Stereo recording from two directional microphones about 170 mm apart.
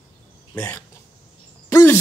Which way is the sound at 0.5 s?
15° left (ahead or behind).